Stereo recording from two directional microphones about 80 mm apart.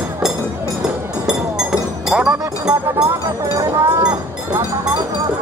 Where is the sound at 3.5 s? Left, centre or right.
Right.